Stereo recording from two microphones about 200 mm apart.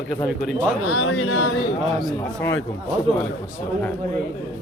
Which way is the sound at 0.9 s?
90° left.